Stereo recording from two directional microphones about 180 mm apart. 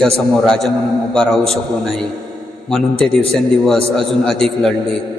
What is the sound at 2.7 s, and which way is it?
A man's voice, 5° left (ahead or behind).